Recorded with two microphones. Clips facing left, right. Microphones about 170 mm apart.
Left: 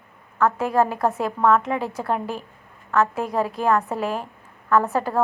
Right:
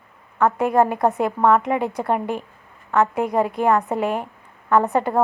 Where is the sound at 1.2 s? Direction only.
15° right (ahead or behind).